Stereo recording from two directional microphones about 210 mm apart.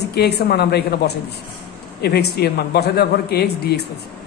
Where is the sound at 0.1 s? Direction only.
50° left (ahead or behind).